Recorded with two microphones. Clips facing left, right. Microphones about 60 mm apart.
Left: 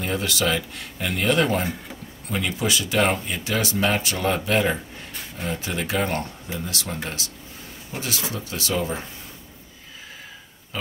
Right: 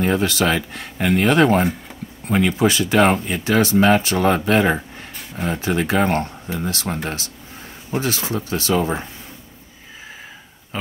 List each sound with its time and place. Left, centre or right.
0.0 s speech: right